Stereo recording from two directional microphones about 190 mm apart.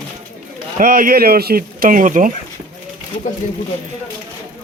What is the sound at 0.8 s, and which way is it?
Speech, 45° right (ahead or behind).